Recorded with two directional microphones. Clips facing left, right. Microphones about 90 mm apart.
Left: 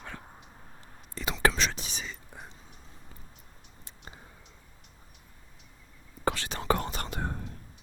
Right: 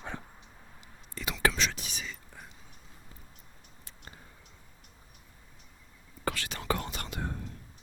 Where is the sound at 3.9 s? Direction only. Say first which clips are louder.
Left 2 dB; 20° left (ahead or behind).